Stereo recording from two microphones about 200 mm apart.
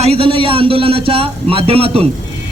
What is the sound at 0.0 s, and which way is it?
A man's voice, 30° right (ahead or behind).